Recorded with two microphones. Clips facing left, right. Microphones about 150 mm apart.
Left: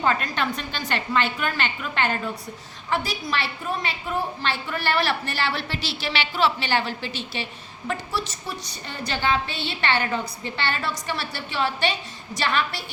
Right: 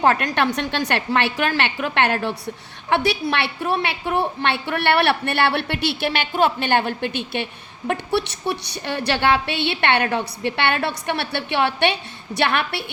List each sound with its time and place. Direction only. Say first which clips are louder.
0.0 s a woman's voice: right 5 dB; 70° right (ahead or behind)